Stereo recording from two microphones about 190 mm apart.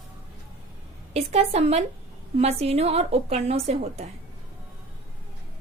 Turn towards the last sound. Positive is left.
turn(degrees=-35)  # may be behind; listen again after turning